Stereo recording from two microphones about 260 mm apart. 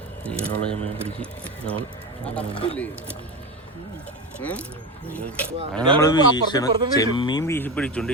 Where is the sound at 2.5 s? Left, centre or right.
Left.